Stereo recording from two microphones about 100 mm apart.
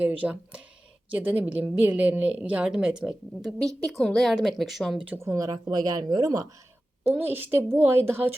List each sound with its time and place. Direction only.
0.0 s a woman's voice: 15° right (ahead or behind)
4.9 s a woman's voice: 15° right (ahead or behind)
5.2 s speech: 35° right (ahead or behind)
7.1 s speech: 20° right (ahead or behind)